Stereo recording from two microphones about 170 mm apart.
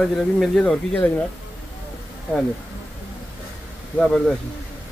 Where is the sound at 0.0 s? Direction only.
Centre (ahead or behind).